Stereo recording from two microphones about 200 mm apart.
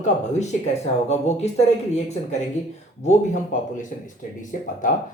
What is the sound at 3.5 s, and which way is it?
Speech, 40° left (ahead or behind).